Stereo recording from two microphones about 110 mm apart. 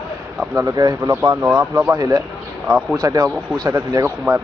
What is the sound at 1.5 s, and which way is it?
Speech, 15° right (ahead or behind).